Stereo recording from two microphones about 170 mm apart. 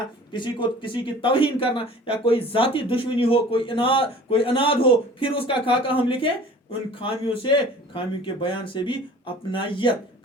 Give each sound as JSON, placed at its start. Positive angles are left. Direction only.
{"t": 0.3, "sound": "a man's voice", "side_deg": 25}